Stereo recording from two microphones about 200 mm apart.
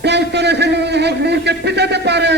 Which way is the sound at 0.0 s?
60° right (ahead or behind).